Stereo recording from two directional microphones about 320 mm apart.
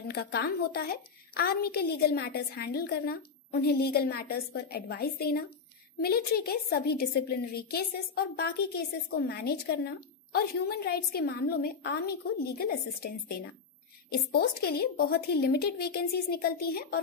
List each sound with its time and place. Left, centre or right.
0.1 s a woman's voice: left
14.6 s a woman's voice: left